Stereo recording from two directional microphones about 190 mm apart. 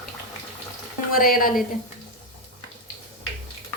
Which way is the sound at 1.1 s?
50° left (ahead or behind).